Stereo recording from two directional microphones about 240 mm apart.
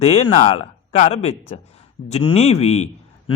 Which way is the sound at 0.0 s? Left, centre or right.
Left.